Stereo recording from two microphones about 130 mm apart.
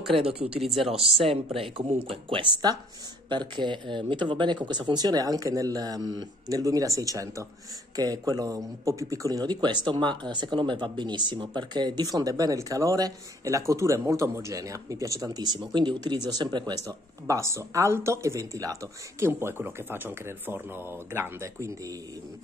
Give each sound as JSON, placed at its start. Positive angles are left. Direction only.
{"t": 0.0, "sound": "speech", "side_deg": 0}
{"t": 1.2, "sound": "speech", "side_deg": -45}